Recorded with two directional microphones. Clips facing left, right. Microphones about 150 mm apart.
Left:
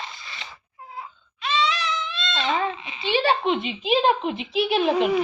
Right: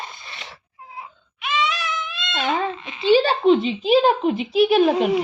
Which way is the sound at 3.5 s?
35° right (ahead or behind).